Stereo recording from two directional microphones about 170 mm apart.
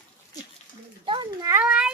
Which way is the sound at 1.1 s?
25° right (ahead or behind).